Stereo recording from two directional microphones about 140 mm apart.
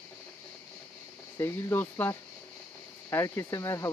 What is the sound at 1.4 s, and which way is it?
Speech, 15° left (ahead or behind).